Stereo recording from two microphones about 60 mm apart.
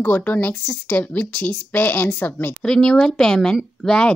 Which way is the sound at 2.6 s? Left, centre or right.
Centre.